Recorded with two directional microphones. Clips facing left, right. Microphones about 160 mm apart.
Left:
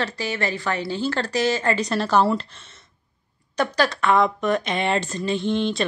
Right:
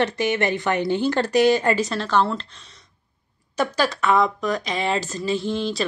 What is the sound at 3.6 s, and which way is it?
Speech, 5° right (ahead or behind).